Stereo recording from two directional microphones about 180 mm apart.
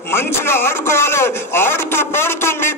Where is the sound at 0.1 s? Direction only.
15° left (ahead or behind).